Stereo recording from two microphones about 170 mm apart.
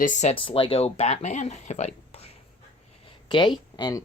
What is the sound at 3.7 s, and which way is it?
Speech, 25° left (ahead or behind).